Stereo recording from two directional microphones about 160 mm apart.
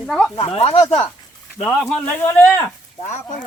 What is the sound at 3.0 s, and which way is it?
Speech, 50° left (ahead or behind).